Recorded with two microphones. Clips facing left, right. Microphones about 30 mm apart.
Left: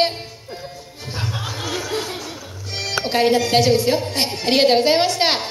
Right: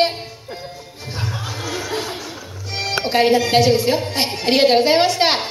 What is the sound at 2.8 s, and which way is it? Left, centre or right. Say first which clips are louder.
Speech: right 2 dB; centre.